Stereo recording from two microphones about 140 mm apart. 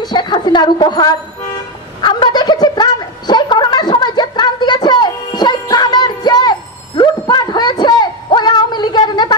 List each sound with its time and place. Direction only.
0.0 s a woman's voice: 30° left (ahead or behind)
2.0 s a sound: 35° left (ahead or behind)
7.0 s music: 30° left (ahead or behind)